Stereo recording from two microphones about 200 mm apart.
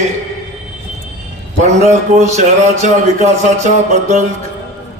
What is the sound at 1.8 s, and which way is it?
Speech, 35° right (ahead or behind).